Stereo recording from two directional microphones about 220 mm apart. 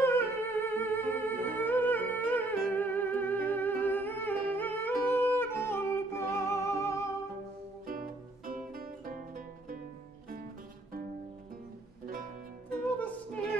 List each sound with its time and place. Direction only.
0.0 s music: 10° left (ahead or behind)
7.8 s music: 40° right (ahead or behind)